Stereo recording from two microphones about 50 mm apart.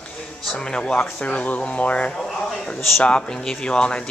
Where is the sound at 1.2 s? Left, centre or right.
Left.